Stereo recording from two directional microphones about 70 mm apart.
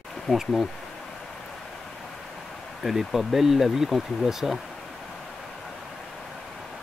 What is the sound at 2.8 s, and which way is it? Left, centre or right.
Speech, centre.